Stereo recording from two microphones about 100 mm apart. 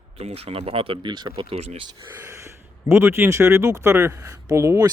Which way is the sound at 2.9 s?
25° right (ahead or behind).